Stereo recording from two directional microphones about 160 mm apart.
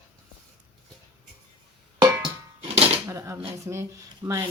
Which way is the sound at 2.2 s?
35° right (ahead or behind).